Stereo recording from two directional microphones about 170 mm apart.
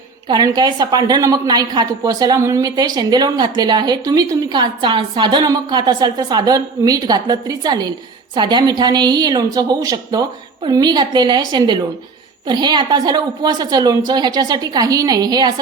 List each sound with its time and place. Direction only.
0.3 s a woman's voice: 25° right (ahead or behind)